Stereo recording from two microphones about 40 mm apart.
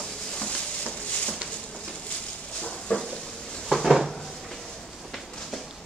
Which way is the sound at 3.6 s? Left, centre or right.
Centre.